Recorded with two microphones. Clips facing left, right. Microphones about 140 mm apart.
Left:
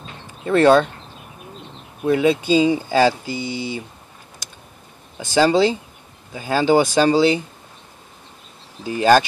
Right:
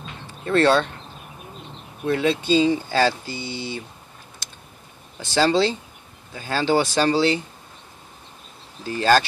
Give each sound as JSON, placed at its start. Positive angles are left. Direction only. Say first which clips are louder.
{"t": 0.5, "sound": "speech", "louder": "left 4 dB", "side_deg": 15}
{"t": 2.0, "sound": "speech", "louder": "left 4 dB", "side_deg": 10}
{"t": 5.2, "sound": "speech", "louder": "left 4 dB", "side_deg": 15}
{"t": 8.8, "sound": "speech", "louder": "left 4 dB", "side_deg": 15}